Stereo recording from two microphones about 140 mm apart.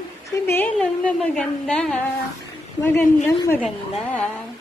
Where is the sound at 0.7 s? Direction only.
5° left (ahead or behind).